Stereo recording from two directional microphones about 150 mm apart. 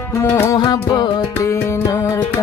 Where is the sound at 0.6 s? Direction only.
30° left (ahead or behind).